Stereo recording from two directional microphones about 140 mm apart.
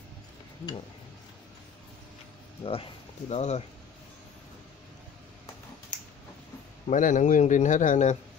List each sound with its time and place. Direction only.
2.6 s speech: 40° left (ahead or behind)
6.9 s a man's voice: 65° left (ahead or behind)